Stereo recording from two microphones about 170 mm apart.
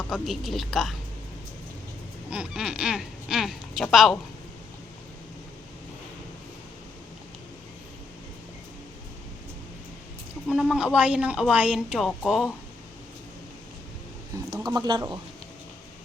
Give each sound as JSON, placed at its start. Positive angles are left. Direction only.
{"t": 0.1, "sound": "speech", "side_deg": 0}
{"t": 2.3, "sound": "speech", "side_deg": -5}
{"t": 10.5, "sound": "speech", "side_deg": -5}
{"t": 14.6, "sound": "speech", "side_deg": -25}